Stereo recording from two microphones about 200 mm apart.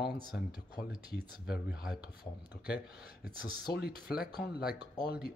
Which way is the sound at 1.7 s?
5° right (ahead or behind).